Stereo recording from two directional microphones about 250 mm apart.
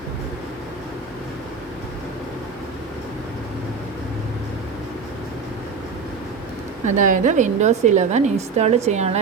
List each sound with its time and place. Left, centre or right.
6.8 s a woman's voice: right